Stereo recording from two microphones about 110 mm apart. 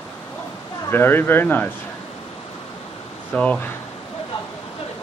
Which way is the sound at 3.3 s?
10° left (ahead or behind).